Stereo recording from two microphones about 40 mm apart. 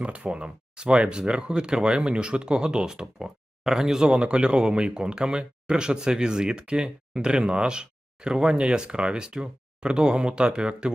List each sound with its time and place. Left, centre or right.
0.0 s speech: right